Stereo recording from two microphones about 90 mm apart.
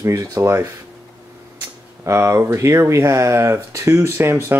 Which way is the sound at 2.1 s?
30° right (ahead or behind).